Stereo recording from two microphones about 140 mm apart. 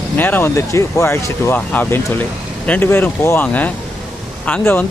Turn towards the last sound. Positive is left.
turn(degrees=15)  # may be behind; listen again after turning